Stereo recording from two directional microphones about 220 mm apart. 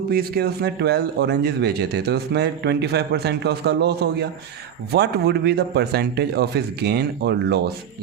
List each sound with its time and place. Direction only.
0.1 s a man's voice: 45° right (ahead or behind)